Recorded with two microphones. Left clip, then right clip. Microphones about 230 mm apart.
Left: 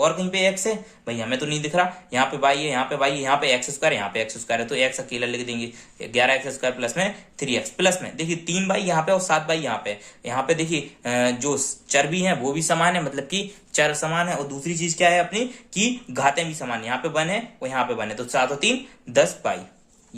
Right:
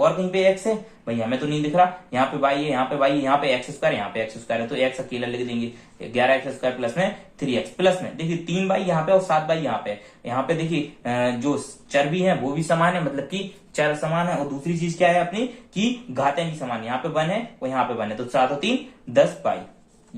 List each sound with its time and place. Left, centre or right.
0.0 s speech: left